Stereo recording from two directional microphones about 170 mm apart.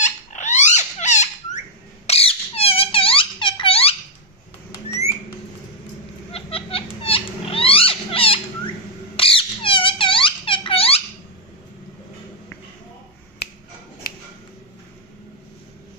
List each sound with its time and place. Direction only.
0.0 s a sound: 45° left (ahead or behind)
2.0 s squeak: 35° left (ahead or behind)
6.3 s rodents: 35° left (ahead or behind)
9.1 s squeak: 30° left (ahead or behind)
14.0 s tick-tock: 60° left (ahead or behind)